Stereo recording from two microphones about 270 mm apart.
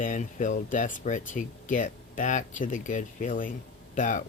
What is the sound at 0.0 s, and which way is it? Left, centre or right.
Speech, left.